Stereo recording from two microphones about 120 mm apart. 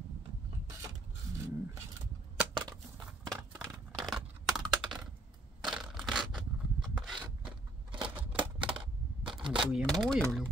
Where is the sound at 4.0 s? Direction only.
Centre (ahead or behind).